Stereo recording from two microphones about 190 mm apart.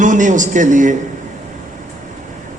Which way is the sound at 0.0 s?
40° right (ahead or behind).